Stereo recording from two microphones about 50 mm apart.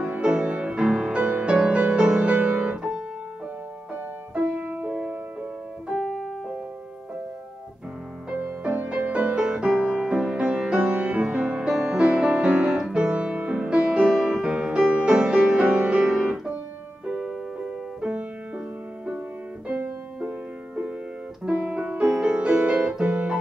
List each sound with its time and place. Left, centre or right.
0.0 s music: right
3.9 s music: right
5.9 s keyboard: centre
8.3 s music: right
9.3 s music: centre
17.0 s music: right
20.2 s music: right